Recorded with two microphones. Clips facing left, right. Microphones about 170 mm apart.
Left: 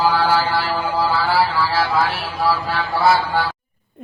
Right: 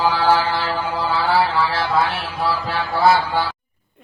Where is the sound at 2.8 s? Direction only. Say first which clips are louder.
Right 1 dB; centre (ahead or behind).